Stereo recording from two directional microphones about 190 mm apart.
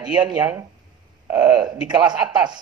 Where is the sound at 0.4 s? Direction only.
10° right (ahead or behind).